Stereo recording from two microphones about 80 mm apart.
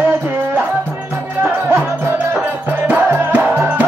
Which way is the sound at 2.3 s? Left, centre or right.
Right.